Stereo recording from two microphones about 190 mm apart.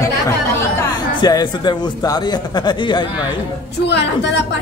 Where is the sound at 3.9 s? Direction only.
65° left (ahead or behind).